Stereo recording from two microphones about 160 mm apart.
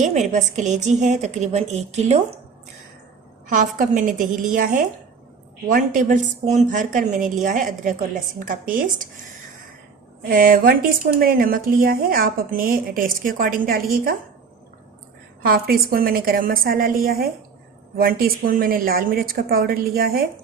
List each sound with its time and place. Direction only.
0.0 s a woman's voice: 45° right (ahead or behind)
3.5 s a woman's voice: 50° right (ahead or behind)
10.2 s a woman's voice: 60° right (ahead or behind)
15.4 s a woman's voice: 70° right (ahead or behind)